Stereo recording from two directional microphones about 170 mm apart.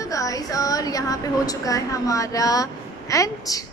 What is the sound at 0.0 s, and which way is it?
A woman's voice, 20° left (ahead or behind).